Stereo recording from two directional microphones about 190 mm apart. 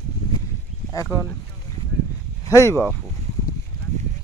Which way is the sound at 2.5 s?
15° left (ahead or behind).